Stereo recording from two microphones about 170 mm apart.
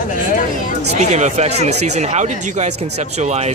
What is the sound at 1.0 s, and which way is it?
Speech, 45° right (ahead or behind).